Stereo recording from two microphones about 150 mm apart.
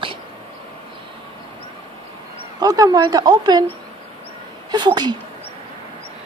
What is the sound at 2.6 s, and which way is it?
A woman's voice, 25° right (ahead or behind).